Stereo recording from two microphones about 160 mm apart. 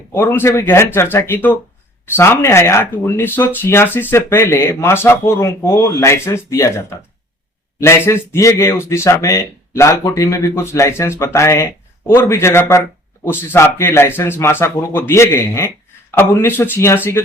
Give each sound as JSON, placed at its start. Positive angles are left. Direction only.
{"t": 0.1, "sound": "speech", "side_deg": 15}